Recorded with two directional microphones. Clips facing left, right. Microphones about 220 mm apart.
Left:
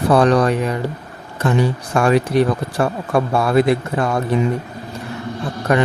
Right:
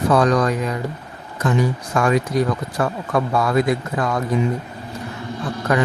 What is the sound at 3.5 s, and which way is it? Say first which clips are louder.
Speech: left 5 dB; 65° left (ahead or behind).